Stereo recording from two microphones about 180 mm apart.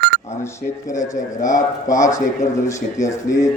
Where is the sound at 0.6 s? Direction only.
50° left (ahead or behind).